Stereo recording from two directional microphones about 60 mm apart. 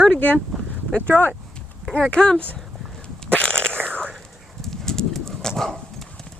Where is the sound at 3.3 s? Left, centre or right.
Centre.